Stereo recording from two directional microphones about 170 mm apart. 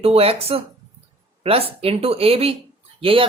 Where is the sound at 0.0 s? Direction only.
35° right (ahead or behind).